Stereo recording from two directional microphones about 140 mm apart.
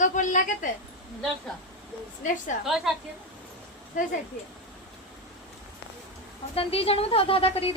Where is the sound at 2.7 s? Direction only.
Centre (ahead or behind).